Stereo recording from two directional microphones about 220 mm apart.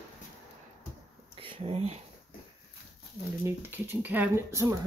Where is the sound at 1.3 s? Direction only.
25° right (ahead or behind).